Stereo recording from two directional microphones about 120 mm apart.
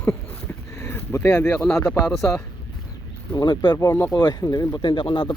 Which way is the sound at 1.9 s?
5° left (ahead or behind).